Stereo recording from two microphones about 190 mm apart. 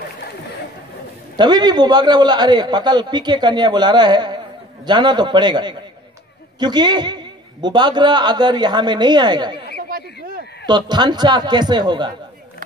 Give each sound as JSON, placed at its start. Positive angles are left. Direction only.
{"t": 1.3, "sound": "a man's voice", "side_deg": -20}
{"t": 9.8, "sound": "a sound", "side_deg": -50}
{"t": 10.7, "sound": "a man's voice", "side_deg": -20}